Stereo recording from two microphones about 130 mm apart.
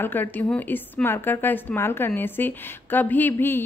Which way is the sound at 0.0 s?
15° left (ahead or behind).